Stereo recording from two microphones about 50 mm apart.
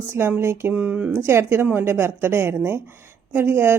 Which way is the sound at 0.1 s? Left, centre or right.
Right.